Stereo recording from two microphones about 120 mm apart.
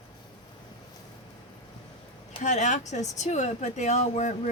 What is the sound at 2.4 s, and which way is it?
Speech, 90° left.